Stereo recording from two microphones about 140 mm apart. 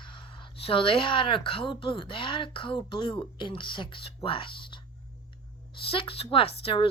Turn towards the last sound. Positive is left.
turn(degrees=40)  # may be behind; listen again after turning